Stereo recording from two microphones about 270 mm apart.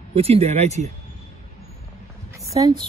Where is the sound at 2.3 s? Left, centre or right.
Centre.